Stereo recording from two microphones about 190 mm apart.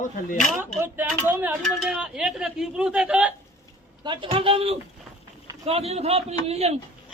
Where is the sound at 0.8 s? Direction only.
10° right (ahead or behind).